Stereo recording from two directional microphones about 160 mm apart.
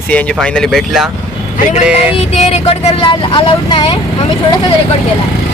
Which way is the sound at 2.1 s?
40° left (ahead or behind).